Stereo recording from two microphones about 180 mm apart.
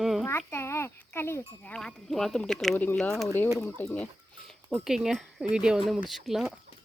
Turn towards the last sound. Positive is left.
turn(degrees=0)  # may be behind; listen again after turning